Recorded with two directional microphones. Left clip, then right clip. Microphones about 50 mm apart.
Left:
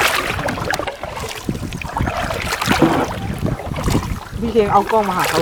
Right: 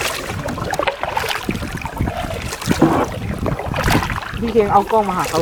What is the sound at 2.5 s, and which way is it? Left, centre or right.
Boat, left.